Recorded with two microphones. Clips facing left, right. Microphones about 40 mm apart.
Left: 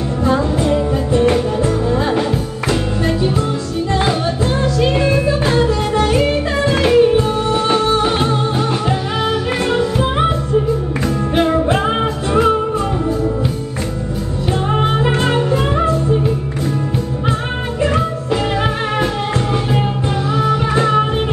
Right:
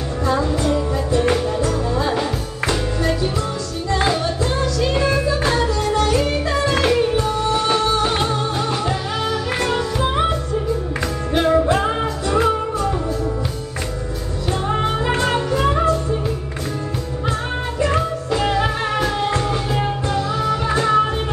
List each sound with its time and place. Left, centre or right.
0.2 s music: left
4.6 s music: left
9.7 s music: left
11.3 s music: left
14.8 s music: left
17.8 s music: left